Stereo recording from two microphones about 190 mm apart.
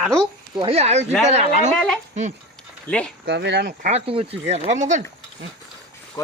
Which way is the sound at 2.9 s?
5° left (ahead or behind).